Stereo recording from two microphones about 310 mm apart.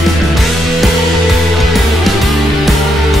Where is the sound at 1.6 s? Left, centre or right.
Centre.